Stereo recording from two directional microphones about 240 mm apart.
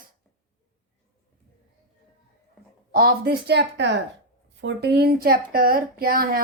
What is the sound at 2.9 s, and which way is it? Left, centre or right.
A woman's voice, right.